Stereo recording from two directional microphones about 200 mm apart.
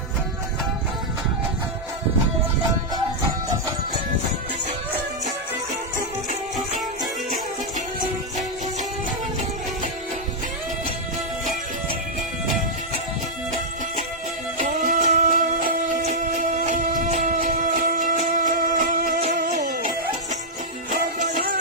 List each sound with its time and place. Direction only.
14.6 s music: 40° right (ahead or behind)
20.9 s music: 40° right (ahead or behind)